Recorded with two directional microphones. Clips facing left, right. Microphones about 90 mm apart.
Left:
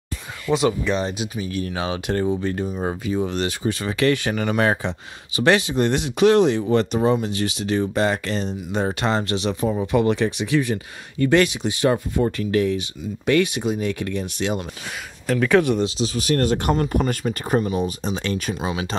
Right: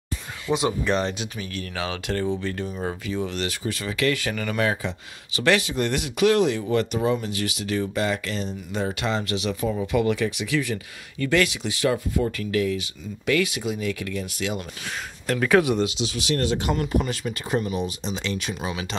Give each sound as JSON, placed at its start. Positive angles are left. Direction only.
{"t": 0.5, "sound": "speech", "side_deg": -10}
{"t": 0.8, "sound": "speech", "side_deg": 5}
{"t": 15.2, "sound": "speech", "side_deg": -5}
{"t": 15.8, "sound": "speech", "side_deg": 40}
{"t": 16.7, "sound": "speech", "side_deg": 40}
{"t": 18.6, "sound": "speech", "side_deg": 30}